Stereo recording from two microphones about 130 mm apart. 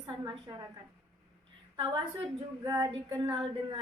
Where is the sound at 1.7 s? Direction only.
40° right (ahead or behind).